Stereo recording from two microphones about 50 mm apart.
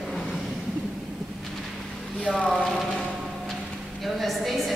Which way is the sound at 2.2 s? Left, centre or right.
Left.